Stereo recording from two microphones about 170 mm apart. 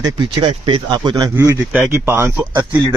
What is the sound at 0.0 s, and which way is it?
Speech, 25° right (ahead or behind).